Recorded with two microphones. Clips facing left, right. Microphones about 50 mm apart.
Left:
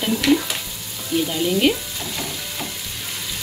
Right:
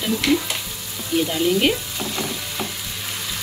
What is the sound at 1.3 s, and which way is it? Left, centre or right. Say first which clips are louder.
Frying: left 1 dB; centre.